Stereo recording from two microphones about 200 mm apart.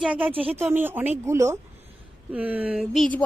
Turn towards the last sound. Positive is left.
turn(degrees=0)  # may be behind; listen again after turning